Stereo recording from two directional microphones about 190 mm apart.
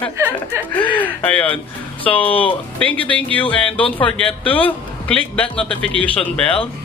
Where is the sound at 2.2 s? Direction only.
30° left (ahead or behind).